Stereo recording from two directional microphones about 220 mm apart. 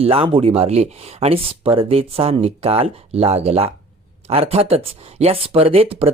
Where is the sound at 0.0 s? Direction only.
25° right (ahead or behind).